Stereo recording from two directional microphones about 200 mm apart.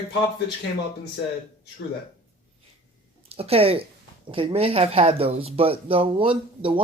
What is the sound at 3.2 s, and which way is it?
Speech, 30° right (ahead or behind).